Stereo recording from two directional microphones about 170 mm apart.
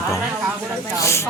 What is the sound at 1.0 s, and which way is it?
Speech, 15° left (ahead or behind).